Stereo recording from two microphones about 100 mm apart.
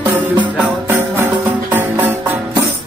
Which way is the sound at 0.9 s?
25° right (ahead or behind).